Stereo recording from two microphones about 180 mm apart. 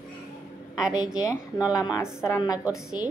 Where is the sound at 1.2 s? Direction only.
20° left (ahead or behind).